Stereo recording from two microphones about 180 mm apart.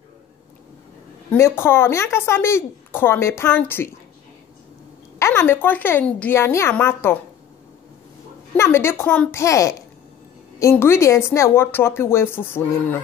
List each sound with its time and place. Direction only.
1.3 s speech: 15° left (ahead or behind)
5.2 s speech: 15° left (ahead or behind)
8.5 s speech: 15° left (ahead or behind)